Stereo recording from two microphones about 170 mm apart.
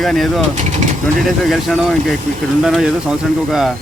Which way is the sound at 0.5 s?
45° right (ahead or behind).